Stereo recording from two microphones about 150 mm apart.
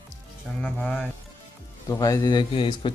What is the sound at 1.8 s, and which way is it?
A man's voice, 20° left (ahead or behind).